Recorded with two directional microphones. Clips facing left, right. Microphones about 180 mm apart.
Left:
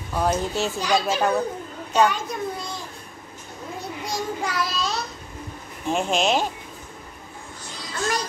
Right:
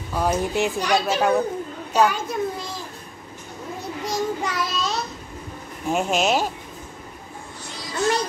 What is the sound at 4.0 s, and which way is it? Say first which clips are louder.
Child singing: right 3 dB; centre (ahead or behind).